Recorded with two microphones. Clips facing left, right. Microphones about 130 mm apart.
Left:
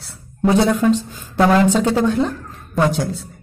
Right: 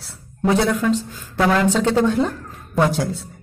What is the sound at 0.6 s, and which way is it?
A woman's voice, 25° left (ahead or behind).